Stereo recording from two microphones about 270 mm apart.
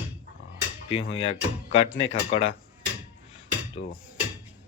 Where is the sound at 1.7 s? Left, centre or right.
Left.